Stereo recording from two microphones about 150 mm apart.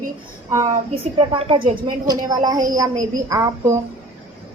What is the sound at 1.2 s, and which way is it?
A woman's voice, 40° right (ahead or behind).